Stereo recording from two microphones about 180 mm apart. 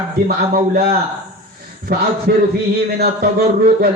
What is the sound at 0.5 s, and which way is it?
A man's voice, 50° right (ahead or behind).